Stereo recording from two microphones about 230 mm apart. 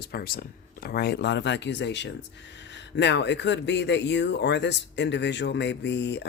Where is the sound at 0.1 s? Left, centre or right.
Left.